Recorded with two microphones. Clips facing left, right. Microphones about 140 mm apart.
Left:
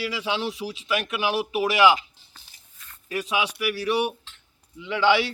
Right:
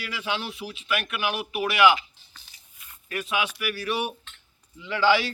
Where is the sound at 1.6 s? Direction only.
35° left (ahead or behind).